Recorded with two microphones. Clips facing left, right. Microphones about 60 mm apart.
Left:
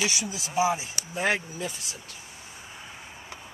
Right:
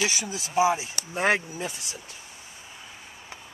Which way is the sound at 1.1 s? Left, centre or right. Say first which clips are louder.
Right 3 dB; right.